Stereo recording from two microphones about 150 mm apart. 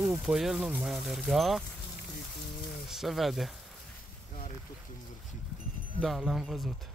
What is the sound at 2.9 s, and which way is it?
Speech, centre (ahead or behind).